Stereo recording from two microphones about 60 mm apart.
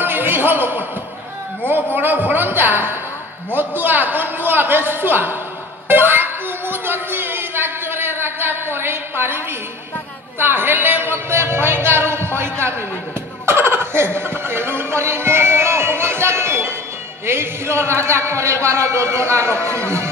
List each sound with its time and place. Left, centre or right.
0.0 s a sound: right
2.0 s speech: right
13.5 s music: right
17.3 s a man's voice: right